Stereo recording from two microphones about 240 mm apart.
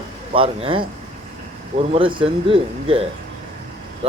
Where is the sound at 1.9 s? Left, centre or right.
Right.